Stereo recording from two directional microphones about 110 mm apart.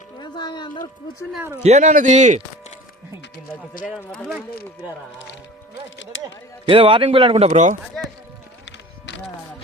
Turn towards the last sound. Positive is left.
turn(degrees=-80)